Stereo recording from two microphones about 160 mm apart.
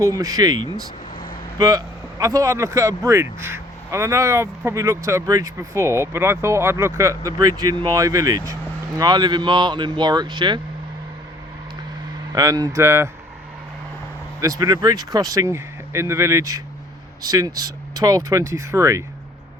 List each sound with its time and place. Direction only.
0.0 s speech: 20° right (ahead or behind)
12.3 s speech: 20° right (ahead or behind)
14.4 s speech: 20° right (ahead or behind)